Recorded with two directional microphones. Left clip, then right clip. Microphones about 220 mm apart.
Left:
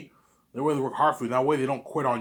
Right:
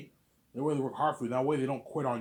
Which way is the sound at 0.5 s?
20° left (ahead or behind).